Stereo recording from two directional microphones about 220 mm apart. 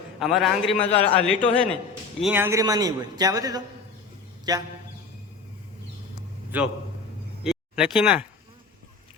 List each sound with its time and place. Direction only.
0.2 s a man's voice: centre (ahead or behind)
0.8 s a man's voice: 25° left (ahead or behind)
1.1 s a man's voice: 5° left (ahead or behind)
2.2 s a man's voice: 10° right (ahead or behind)
6.5 s a man's voice: 5° right (ahead or behind)